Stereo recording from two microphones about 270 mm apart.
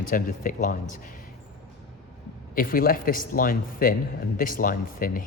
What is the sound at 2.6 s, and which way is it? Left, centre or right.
Speech, left.